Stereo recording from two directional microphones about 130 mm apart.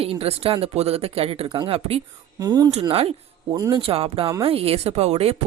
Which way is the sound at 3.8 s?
45° right (ahead or behind).